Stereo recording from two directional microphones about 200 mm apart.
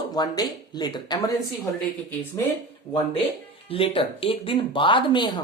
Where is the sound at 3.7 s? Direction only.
25° left (ahead or behind).